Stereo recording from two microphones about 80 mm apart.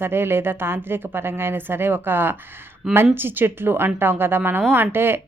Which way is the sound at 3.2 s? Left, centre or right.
Right.